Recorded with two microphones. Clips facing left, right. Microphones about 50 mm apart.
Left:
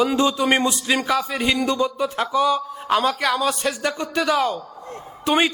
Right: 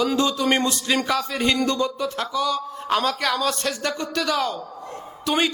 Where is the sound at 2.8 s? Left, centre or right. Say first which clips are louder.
Left 2 dB; centre.